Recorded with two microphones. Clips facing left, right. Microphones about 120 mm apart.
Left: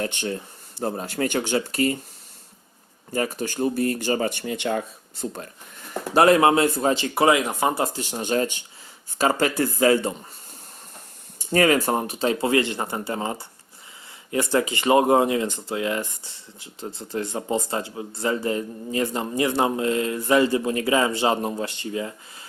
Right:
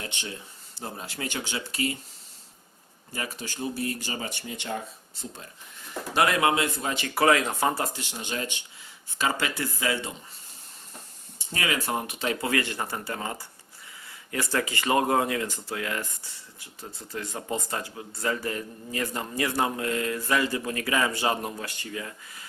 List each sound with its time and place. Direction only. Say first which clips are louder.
0.0 s speech: left 10 dB; 50° left (ahead or behind)
3.1 s speech: left 10 dB; 45° left (ahead or behind); by 4.8 s 70° left (ahead or behind)
5.2 s speech: left 10 dB; 55° left (ahead or behind)
6.1 s speech: left 7 dB; 35° left (ahead or behind); by 7.9 s 20° left (ahead or behind)
7.9 s speech: left 10 dB; 45° left (ahead or behind)
11.3 s speech: left 11 dB; 45° left (ahead or behind); by 22.4 s 25° left (ahead or behind)